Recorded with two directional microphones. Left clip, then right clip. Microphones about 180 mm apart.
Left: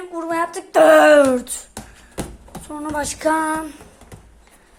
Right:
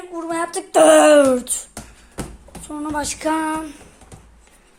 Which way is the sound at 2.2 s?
15° left (ahead or behind).